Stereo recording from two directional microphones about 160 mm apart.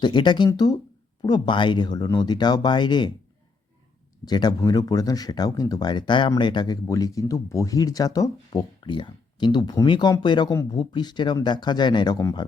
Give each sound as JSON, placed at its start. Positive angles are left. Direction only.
{"t": 0.0, "sound": "speech", "side_deg": 30}
{"t": 4.3, "sound": "speech", "side_deg": 25}